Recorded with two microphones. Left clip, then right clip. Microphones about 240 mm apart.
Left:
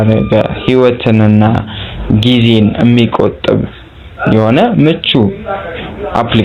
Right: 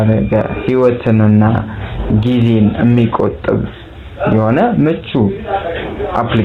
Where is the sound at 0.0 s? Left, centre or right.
Left.